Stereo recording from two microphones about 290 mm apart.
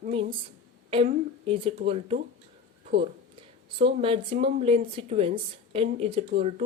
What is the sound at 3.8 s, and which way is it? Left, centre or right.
Speech, centre.